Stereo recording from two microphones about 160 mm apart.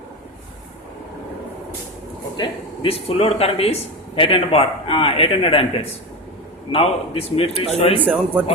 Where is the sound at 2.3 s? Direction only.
35° left (ahead or behind).